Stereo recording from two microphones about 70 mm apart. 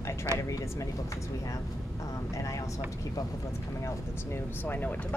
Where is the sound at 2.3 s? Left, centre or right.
Left.